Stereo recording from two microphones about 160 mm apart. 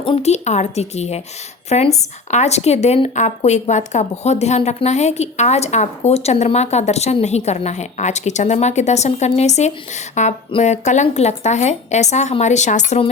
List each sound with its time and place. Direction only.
0.0 s speech: 40° left (ahead or behind)